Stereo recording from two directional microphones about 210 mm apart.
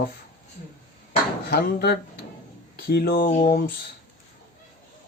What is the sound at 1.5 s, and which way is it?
Speech, 50° left (ahead or behind).